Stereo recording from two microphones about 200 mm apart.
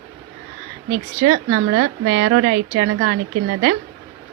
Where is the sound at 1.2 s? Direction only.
80° right.